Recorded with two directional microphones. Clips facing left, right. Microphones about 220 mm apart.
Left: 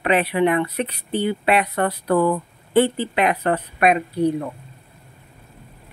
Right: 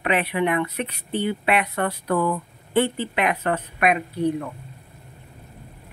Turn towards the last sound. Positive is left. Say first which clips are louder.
# left 3 dB
turn(degrees=35)  # may be behind; listen again after turning